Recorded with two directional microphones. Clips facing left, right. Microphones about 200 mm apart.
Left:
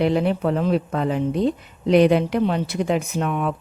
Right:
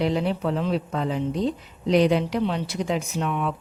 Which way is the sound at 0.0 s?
55° left (ahead or behind).